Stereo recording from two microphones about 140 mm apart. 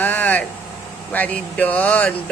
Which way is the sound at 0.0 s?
10° left (ahead or behind).